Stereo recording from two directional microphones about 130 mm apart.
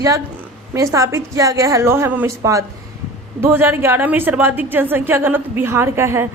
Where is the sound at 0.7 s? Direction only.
25° right (ahead or behind).